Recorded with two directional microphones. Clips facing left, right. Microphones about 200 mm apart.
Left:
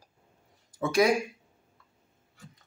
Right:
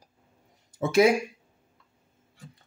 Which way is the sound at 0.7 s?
25° right (ahead or behind).